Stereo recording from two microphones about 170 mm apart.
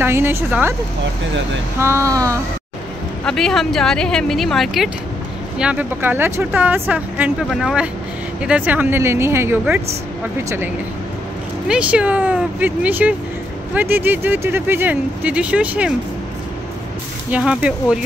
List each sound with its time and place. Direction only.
0.0 s speech: 15° right (ahead or behind)
1.8 s speech: 15° right (ahead or behind)
3.3 s speech: centre (ahead or behind); by 9.8 s 15° right (ahead or behind)
11.6 s speech: 5° right (ahead or behind)
17.3 s speech: 5° right (ahead or behind)